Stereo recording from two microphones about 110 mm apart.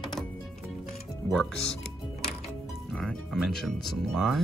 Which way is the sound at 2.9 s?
5° left (ahead or behind).